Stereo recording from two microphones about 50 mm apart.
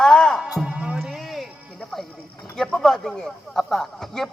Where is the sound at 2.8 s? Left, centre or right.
Centre.